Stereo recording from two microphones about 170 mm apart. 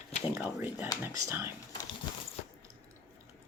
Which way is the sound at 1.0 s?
10° right (ahead or behind).